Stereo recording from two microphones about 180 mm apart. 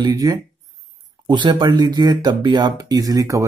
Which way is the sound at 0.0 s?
20° right (ahead or behind).